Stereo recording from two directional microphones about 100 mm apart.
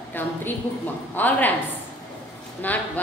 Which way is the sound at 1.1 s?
20° left (ahead or behind).